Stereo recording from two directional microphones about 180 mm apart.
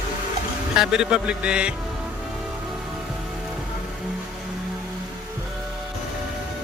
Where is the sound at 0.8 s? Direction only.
5° right (ahead or behind).